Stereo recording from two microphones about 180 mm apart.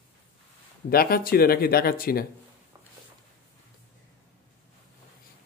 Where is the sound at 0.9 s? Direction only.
55° left (ahead or behind).